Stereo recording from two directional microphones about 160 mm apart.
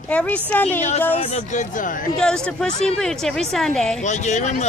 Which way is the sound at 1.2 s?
50° left (ahead or behind).